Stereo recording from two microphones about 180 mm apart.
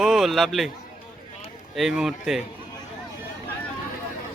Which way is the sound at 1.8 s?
Centre (ahead or behind).